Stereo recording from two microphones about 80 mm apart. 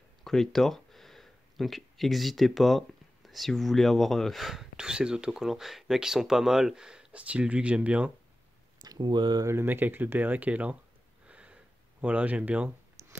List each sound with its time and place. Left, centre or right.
0.2 s speech: centre
8.8 s speech: right
9.4 s speech: right
9.7 s speech: right
11.2 s gasp: centre